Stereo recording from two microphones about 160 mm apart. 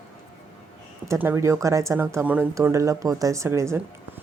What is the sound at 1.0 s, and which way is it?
Speech, 15° right (ahead or behind).